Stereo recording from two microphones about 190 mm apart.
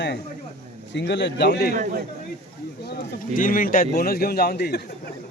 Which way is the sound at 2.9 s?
50° left (ahead or behind).